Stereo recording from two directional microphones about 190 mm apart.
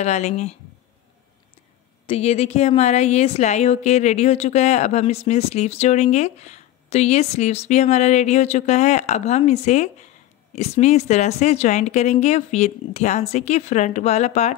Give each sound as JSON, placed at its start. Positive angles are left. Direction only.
{"t": 0.0, "sound": "a woman's voice", "side_deg": 35}
{"t": 2.0, "sound": "a woman's voice", "side_deg": 35}